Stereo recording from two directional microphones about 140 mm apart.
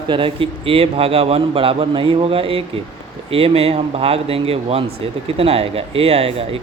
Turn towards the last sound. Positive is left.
turn(degrees=-45)  # may be behind; listen again after turning